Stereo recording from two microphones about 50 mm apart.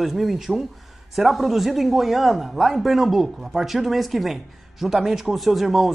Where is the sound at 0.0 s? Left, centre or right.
Centre.